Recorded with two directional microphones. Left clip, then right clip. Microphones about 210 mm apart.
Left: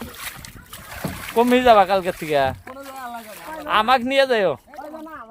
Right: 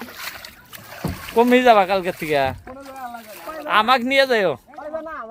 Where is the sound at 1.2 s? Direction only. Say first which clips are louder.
Right 1 dB; 5° left (ahead or behind).